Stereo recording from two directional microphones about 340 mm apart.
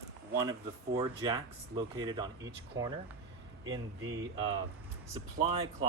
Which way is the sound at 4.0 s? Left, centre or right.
Right.